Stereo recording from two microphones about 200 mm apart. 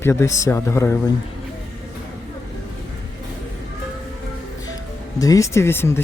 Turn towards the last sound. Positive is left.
turn(degrees=10)  # may be behind; listen again after turning